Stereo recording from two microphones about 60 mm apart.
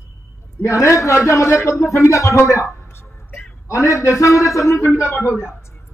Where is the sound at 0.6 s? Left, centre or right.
Left.